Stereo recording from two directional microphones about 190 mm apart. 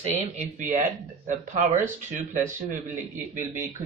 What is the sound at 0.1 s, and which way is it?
Speech, 40° right (ahead or behind).